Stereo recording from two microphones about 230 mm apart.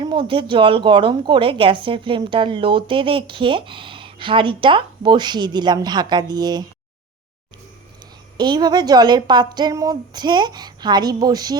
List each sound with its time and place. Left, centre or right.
0.0 s a woman's voice: centre
8.4 s a woman's voice: centre